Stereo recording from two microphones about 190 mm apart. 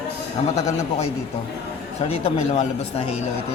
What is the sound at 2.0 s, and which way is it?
Speech, 30° left (ahead or behind).